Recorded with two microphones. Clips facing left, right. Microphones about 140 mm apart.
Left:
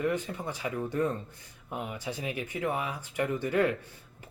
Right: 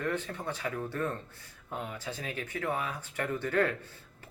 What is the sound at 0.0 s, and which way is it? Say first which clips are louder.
Speech: left 3 dB; 10° left (ahead or behind).